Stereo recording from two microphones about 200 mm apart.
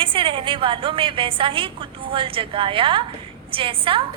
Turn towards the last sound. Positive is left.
turn(degrees=-25)  # may be behind; listen again after turning